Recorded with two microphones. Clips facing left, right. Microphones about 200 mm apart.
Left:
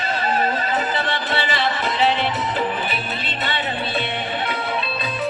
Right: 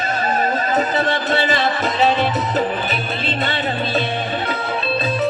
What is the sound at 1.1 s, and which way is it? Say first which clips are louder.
Music: right 5 dB; 45° right (ahead or behind).